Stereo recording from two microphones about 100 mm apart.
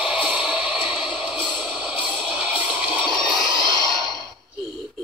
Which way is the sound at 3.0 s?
Centre (ahead or behind).